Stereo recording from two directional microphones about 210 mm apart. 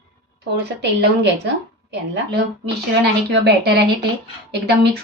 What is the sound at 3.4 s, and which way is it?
Speech, 50° right (ahead or behind).